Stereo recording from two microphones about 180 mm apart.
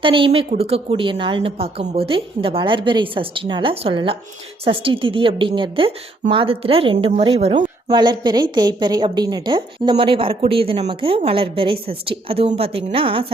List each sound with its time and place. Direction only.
0.0 s a woman's voice: 30° right (ahead or behind)